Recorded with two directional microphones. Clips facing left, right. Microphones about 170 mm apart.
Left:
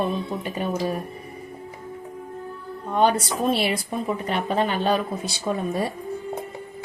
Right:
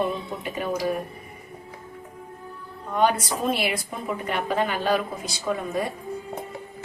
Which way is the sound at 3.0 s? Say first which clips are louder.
Left 2 dB; 30° left (ahead or behind).